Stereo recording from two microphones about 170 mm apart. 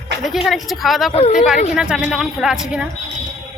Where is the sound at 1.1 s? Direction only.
40° left (ahead or behind).